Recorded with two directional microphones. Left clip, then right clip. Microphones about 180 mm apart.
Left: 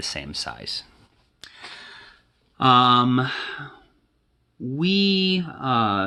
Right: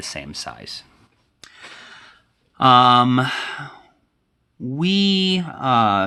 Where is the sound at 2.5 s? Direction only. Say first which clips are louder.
Right 4 dB; 30° right (ahead or behind).